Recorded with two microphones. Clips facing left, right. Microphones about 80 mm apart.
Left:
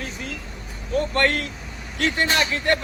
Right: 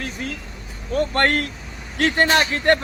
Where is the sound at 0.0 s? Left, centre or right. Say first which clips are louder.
Right 3 dB; right.